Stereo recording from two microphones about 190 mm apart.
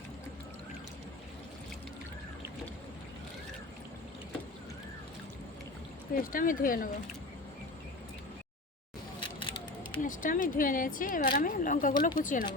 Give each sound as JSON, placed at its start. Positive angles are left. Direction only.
{"t": 6.1, "sound": "speech", "side_deg": 45}
{"t": 10.0, "sound": "speech", "side_deg": 45}